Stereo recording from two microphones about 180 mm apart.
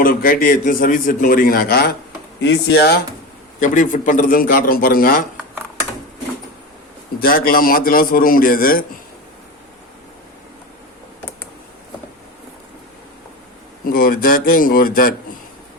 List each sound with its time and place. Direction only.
0.0 s a man's voice: 55° left (ahead or behind)
3.6 s a man's voice: 45° left (ahead or behind)
7.2 s a man's voice: 55° left (ahead or behind)
13.8 s a man's voice: 55° left (ahead or behind)